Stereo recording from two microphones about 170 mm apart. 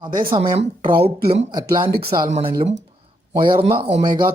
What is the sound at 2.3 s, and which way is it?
Speech, 40° right (ahead or behind).